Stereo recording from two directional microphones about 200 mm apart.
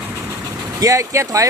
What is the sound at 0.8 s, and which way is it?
Speech, 15° right (ahead or behind).